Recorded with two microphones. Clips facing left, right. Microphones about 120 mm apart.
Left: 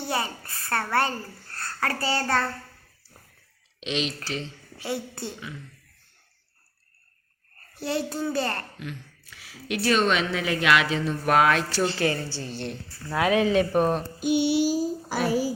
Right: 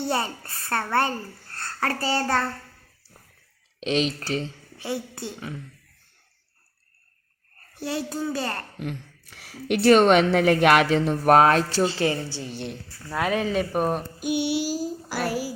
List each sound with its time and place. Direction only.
0.1 s a child's voice: 30° right (ahead or behind)
3.8 s speech: 40° right (ahead or behind)
4.8 s speech: 15° right (ahead or behind)
7.8 s speech: 10° right (ahead or behind)
8.8 s a woman's voice: 60° right (ahead or behind)
11.3 s speech: 35° right (ahead or behind)
11.8 s speech: 25° right (ahead or behind)
13.1 s speech: centre (ahead or behind)